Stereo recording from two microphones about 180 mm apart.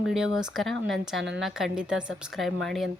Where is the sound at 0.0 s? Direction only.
5° right (ahead or behind).